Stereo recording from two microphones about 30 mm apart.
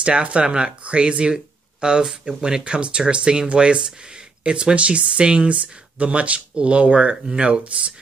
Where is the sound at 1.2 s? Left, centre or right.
Right.